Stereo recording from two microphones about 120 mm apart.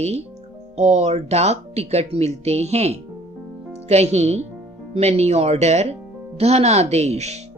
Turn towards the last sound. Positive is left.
turn(degrees=-65)  # may be behind; listen again after turning